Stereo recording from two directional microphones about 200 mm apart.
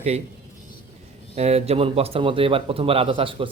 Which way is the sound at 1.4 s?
30° right (ahead or behind).